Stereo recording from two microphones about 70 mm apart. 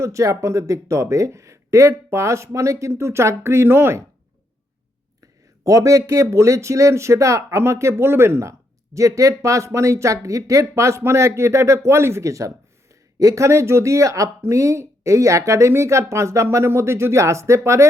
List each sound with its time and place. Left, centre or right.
0.0 s speech: right
5.6 s speech: right